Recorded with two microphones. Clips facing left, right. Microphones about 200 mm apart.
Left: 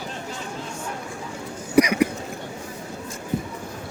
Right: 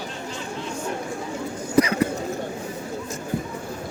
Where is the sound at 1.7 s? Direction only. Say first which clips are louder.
Left 2 dB; 15° left (ahead or behind).